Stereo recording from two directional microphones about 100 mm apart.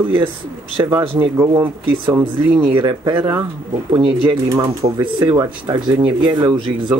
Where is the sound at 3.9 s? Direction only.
65° right (ahead or behind); by 6.9 s 50° right (ahead or behind).